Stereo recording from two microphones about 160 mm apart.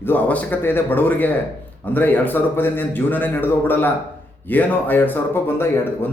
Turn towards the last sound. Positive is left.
turn(degrees=15)  # may be behind; listen again after turning